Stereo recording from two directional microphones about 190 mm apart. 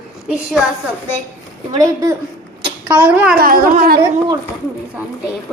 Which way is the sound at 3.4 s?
50° right (ahead or behind).